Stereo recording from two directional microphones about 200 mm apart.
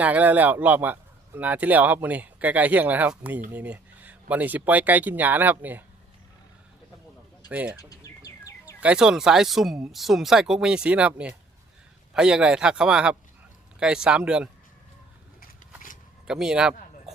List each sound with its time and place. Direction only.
0.0 s speech: 5° right (ahead or behind)
7.5 s speech: 5° right (ahead or behind)
7.8 s bird: 15° left (ahead or behind)
8.8 s speech: 5° right (ahead or behind)
16.2 s speech: 5° right (ahead or behind)